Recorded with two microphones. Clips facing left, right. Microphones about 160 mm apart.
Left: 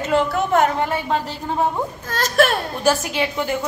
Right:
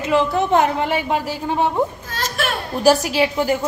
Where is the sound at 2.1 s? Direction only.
45° left (ahead or behind).